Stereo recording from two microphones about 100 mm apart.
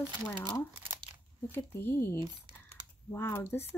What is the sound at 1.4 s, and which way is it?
Speech, 20° left (ahead or behind).